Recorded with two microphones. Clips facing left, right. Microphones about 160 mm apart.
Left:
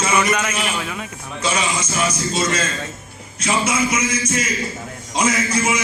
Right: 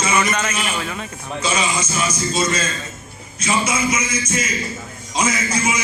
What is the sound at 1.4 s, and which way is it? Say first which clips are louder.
A man's voice: even; 70° left (ahead or behind).